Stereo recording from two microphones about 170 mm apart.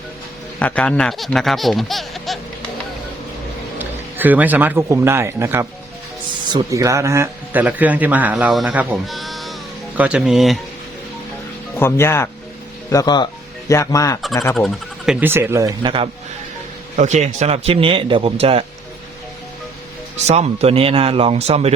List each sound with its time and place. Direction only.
0.6 s speech: 5° left (ahead or behind)
3.8 s speech: 10° right (ahead or behind)
11.8 s speech: 15° left (ahead or behind)
14.5 s speech: centre (ahead or behind); by 16.0 s 30° right (ahead or behind)
17.0 s speech: 40° right (ahead or behind)
20.2 s speech: 40° right (ahead or behind)